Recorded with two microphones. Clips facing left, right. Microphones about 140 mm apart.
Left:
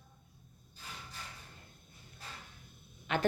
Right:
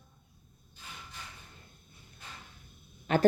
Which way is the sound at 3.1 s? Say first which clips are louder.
Right 6 dB; 40° right (ahead or behind).